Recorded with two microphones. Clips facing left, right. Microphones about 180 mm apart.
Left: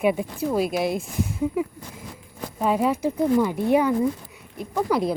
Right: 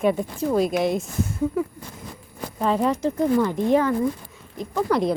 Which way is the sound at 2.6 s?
10° left (ahead or behind).